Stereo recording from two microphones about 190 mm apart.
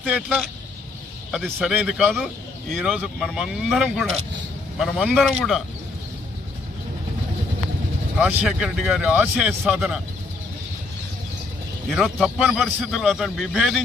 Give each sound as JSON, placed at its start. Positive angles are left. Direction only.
{"t": 0.0, "sound": "speech", "side_deg": -5}
{"t": 8.2, "sound": "speech", "side_deg": -10}
{"t": 11.9, "sound": "speech", "side_deg": 0}